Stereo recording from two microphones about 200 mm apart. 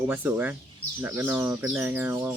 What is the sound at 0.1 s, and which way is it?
Speech, 10° right (ahead or behind).